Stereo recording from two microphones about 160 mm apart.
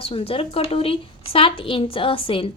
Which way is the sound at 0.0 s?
35° left (ahead or behind).